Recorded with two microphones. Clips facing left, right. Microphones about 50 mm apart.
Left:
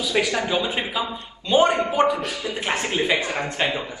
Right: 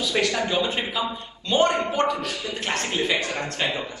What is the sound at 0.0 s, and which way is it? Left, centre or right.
A man's voice, centre.